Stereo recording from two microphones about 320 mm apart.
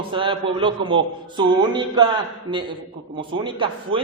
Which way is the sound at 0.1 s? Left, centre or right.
Centre.